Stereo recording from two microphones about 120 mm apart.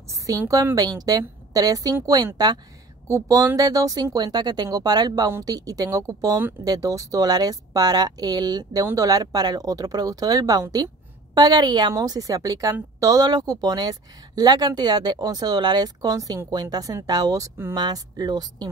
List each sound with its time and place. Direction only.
0.3 s a woman's voice: 30° right (ahead or behind)